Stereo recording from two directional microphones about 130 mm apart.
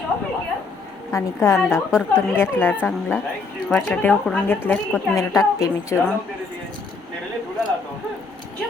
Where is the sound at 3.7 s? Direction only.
5° left (ahead or behind); by 6.1 s 25° left (ahead or behind).